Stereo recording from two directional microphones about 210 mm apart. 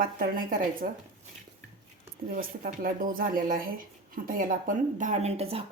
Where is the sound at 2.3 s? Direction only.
40° right (ahead or behind).